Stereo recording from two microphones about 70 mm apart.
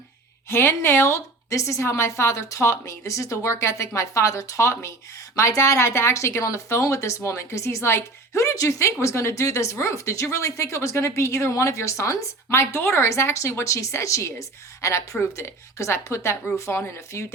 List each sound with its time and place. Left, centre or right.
0.5 s a woman's voice: left